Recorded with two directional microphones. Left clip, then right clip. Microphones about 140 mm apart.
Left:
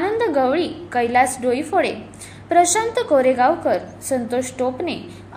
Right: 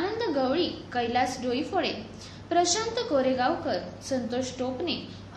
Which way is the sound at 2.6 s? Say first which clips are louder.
Left 9 dB; 45° left (ahead or behind).